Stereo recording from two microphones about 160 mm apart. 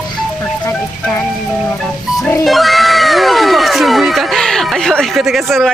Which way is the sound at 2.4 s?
Centre (ahead or behind).